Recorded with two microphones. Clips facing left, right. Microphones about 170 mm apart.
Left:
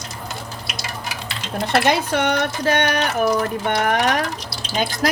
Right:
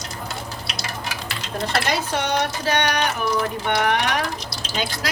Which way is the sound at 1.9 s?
55° left (ahead or behind).